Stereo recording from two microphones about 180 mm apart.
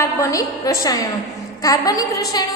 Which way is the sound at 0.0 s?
15° left (ahead or behind).